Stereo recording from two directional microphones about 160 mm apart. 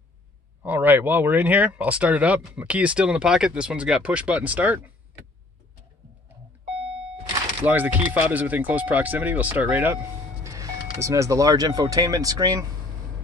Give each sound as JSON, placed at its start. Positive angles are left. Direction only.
{"t": 0.6, "sound": "speech", "side_deg": -10}
{"t": 7.6, "sound": "speech", "side_deg": -10}
{"t": 10.4, "sound": "speech", "side_deg": -20}